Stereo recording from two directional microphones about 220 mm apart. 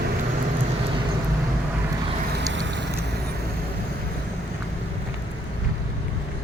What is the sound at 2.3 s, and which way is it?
Vehicle, 55° right (ahead or behind).